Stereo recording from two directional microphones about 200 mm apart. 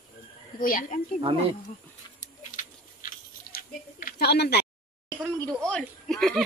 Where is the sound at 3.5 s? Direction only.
50° left (ahead or behind).